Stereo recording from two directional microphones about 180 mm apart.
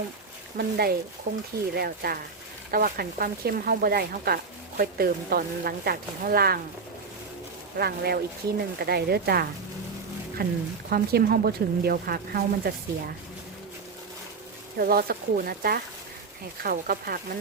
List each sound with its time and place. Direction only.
0.5 s speech: 60° right (ahead or behind)
7.8 s speech: 60° right (ahead or behind)
14.8 s speech: 55° right (ahead or behind)